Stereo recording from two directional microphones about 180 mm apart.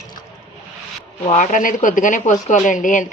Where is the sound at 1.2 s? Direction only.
40° left (ahead or behind).